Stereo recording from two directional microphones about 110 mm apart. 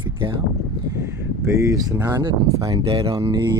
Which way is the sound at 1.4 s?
25° right (ahead or behind).